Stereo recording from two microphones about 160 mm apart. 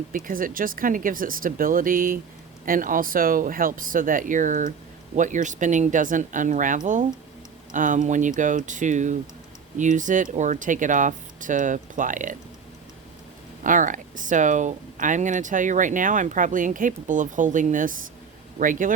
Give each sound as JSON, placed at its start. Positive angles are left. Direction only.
{"t": 0.3, "sound": "speech", "side_deg": -60}
{"t": 13.7, "sound": "speech", "side_deg": -55}